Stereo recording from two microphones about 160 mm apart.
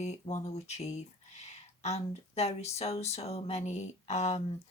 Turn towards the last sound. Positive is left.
turn(degrees=40)  # may be behind; listen again after turning